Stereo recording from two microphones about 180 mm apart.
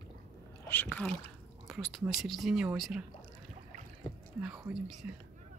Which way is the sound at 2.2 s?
Centre (ahead or behind).